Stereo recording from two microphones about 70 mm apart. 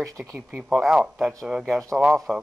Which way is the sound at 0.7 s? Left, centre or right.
Centre.